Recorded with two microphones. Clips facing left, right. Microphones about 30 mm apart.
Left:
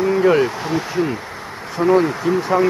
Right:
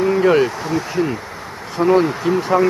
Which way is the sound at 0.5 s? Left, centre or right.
Centre.